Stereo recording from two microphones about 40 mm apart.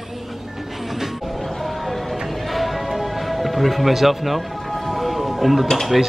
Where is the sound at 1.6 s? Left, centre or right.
Centre.